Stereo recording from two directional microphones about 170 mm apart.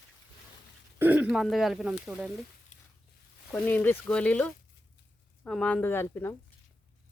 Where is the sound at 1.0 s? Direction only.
10° right (ahead or behind).